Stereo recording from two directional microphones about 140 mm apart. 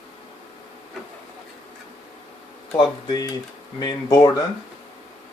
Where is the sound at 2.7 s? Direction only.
30° left (ahead or behind).